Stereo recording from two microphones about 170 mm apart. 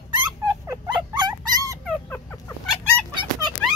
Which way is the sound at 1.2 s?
25° right (ahead or behind).